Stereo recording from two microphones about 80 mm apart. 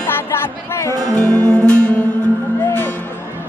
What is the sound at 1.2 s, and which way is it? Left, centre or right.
Music, centre.